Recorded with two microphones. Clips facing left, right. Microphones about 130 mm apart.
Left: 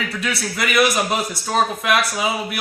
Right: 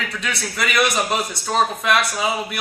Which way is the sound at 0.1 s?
Centre (ahead or behind).